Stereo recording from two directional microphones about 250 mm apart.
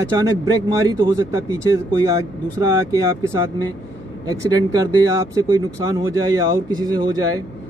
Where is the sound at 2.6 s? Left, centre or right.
Centre.